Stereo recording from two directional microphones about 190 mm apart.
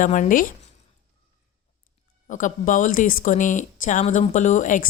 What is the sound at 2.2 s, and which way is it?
Speech, 45° left (ahead or behind).